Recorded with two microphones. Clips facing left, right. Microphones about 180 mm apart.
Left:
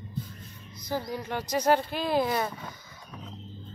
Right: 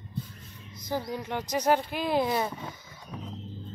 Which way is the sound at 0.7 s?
20° right (ahead or behind).